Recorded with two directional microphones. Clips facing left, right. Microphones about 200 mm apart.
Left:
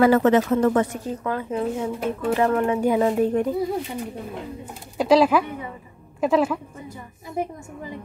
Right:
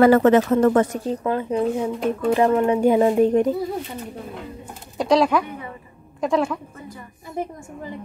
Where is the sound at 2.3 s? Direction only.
25° right (ahead or behind).